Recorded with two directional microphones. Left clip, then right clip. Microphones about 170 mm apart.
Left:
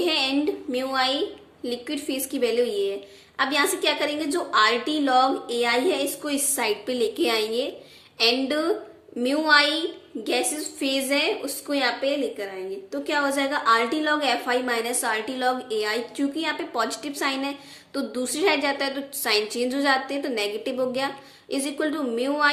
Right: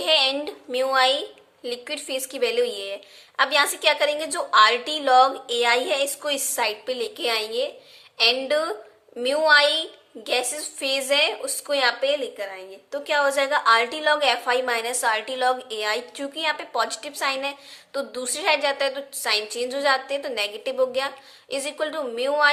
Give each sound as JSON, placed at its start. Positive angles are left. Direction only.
{"t": 0.0, "sound": "a woman's voice", "side_deg": -30}